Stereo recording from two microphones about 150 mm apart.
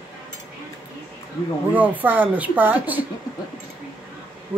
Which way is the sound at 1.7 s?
10° right (ahead or behind).